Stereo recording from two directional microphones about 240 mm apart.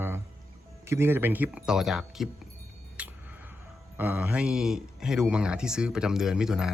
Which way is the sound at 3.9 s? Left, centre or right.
Centre.